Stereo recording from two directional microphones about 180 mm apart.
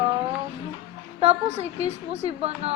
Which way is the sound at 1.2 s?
35° right (ahead or behind).